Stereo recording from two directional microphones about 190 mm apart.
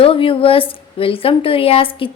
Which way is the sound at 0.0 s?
30° left (ahead or behind).